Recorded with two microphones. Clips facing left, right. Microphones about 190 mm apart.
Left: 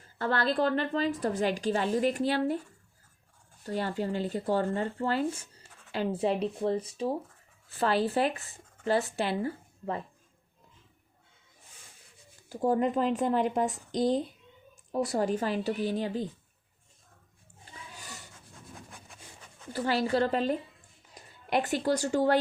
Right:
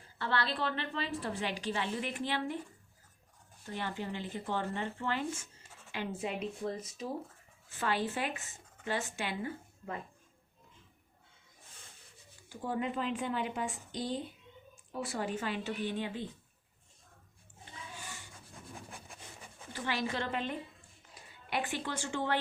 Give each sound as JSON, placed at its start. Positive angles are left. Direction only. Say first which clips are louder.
{"t": 0.2, "sound": "a woman's voice", "louder": "left 7 dB", "side_deg": 45}
{"t": 3.8, "sound": "speech", "louder": "left 6 dB", "side_deg": 45}
{"t": 12.5, "sound": "a woman's voice", "louder": "left 9 dB", "side_deg": 40}
{"t": 17.9, "sound": "a sound", "louder": "left 1 dB", "side_deg": 40}
{"t": 18.9, "sound": "wood", "louder": "right 1 dB", "side_deg": -5}
{"t": 19.7, "sound": "a woman's voice", "louder": "left 8 dB", "side_deg": 35}